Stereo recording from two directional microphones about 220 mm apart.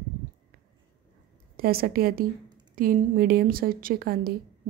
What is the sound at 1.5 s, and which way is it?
A woman's voice, 40° right (ahead or behind).